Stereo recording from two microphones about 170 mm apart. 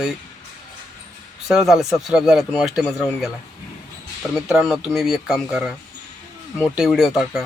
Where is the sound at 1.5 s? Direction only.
Centre (ahead or behind).